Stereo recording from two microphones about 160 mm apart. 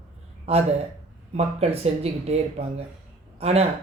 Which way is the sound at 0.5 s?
40° right (ahead or behind).